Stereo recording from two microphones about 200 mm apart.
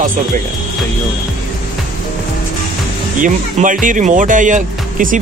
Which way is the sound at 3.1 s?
40° right (ahead or behind).